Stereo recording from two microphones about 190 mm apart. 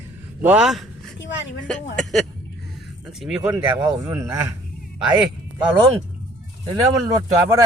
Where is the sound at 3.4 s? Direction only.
15° right (ahead or behind).